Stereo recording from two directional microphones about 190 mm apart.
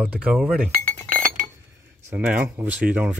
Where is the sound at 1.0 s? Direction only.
45° right (ahead or behind).